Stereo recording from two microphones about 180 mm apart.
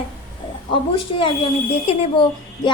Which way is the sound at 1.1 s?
30° left (ahead or behind).